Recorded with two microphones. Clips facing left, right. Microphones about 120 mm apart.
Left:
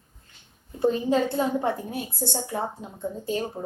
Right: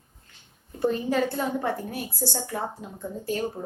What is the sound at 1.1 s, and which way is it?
Speech, 20° left (ahead or behind).